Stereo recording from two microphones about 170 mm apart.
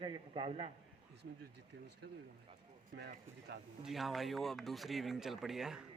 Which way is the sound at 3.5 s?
80° right.